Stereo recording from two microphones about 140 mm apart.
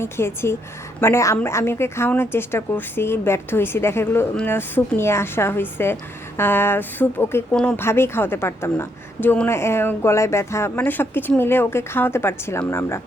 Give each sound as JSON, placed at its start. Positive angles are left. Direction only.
{"t": 0.0, "sound": "a woman's voice", "side_deg": 15}
{"t": 7.5, "sound": "a woman's voice", "side_deg": 5}
{"t": 7.8, "sound": "a woman's voice", "side_deg": 15}